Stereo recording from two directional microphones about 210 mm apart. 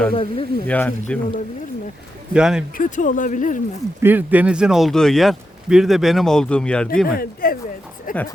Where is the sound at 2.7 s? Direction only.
40° left (ahead or behind).